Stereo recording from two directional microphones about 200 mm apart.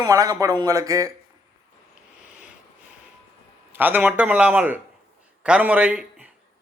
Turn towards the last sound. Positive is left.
turn(degrees=-5)  # may be behind; listen again after turning